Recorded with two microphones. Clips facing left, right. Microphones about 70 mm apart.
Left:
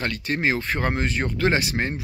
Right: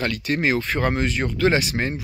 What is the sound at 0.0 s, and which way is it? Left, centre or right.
Speech, left.